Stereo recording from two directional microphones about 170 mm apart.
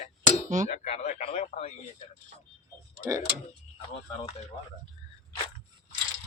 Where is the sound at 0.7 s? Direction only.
40° left (ahead or behind).